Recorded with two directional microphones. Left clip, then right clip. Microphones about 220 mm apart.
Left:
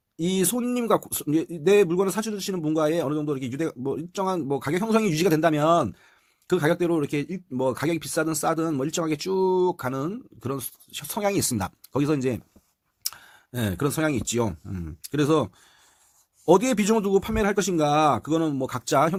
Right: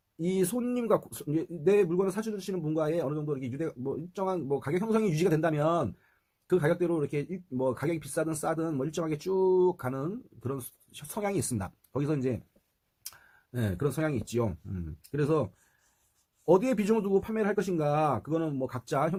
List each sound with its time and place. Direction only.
0.2 s speech: 40° left (ahead or behind)
13.5 s speech: 45° left (ahead or behind)
16.5 s speech: 45° left (ahead or behind)